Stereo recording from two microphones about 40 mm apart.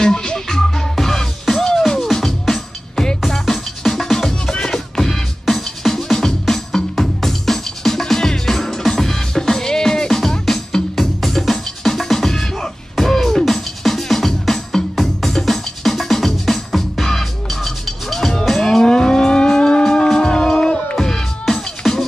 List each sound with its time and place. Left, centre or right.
0.0 s music: centre
18.6 s vehicle: centre
19.8 s music: centre
21.8 s music: centre